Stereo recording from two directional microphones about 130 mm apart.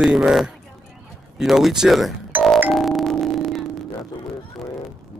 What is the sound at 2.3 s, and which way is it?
Music, 15° right (ahead or behind).